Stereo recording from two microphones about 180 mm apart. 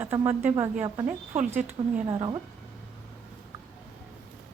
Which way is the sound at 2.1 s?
25° right (ahead or behind).